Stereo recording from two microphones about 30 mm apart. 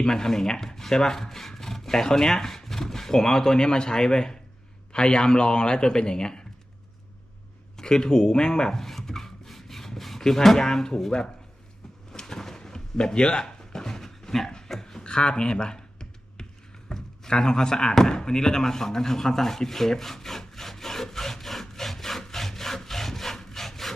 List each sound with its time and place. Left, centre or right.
0.0 s speech: centre
7.8 s speech: left
8.8 s rub: centre
10.4 s speech: centre
12.1 s drawer open or close: centre
13.4 s a sound: centre
15.0 s computer keyboard: left
16.9 s a sound: left; by 22.2 s centre
22.4 s wood: centre